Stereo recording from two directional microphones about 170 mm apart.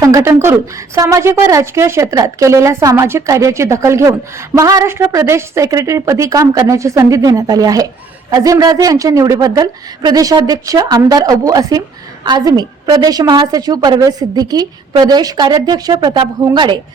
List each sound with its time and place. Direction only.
0.0 s a woman's voice: 20° right (ahead or behind)